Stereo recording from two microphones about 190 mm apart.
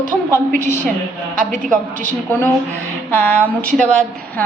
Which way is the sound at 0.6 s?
15° left (ahead or behind).